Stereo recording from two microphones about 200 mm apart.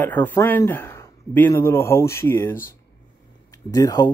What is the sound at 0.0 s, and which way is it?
Speech, 10° left (ahead or behind).